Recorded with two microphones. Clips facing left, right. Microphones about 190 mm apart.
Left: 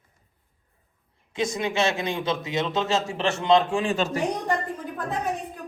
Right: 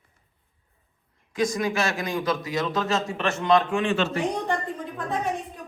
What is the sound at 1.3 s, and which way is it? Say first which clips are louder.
A man's voice: right 1 dB; 25° left (ahead or behind).